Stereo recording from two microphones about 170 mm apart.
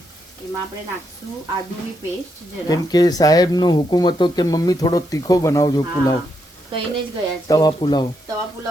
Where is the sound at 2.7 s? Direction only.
25° left (ahead or behind).